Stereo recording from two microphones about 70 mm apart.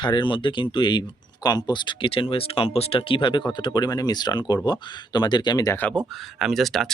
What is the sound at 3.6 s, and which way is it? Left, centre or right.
Speech, left.